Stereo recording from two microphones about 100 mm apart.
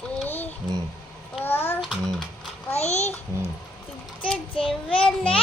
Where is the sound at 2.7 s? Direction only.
90° left.